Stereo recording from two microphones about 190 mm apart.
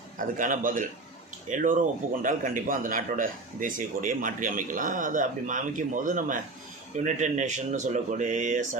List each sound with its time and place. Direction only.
0.2 s a man's voice: 45° right (ahead or behind)